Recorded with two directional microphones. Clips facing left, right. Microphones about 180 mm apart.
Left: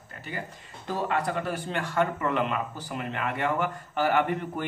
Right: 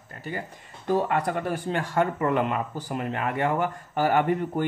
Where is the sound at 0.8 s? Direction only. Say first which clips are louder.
Right 4 dB; 50° right (ahead or behind).